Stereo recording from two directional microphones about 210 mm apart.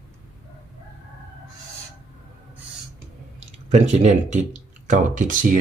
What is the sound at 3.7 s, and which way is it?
Speech, 35° right (ahead or behind).